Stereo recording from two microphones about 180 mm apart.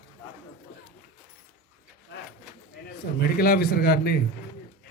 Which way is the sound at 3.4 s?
55° left (ahead or behind).